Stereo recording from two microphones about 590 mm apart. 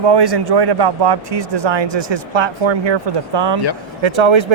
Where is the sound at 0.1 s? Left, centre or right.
Right.